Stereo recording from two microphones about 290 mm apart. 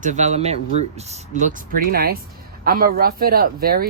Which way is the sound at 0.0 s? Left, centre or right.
Right.